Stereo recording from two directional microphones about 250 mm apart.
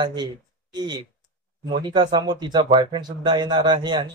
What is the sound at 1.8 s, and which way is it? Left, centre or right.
Speech, centre.